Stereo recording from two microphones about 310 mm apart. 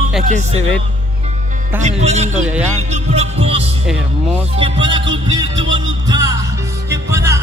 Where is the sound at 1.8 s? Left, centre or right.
Right.